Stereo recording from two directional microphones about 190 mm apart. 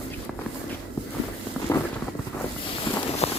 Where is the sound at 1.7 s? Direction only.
15° left (ahead or behind).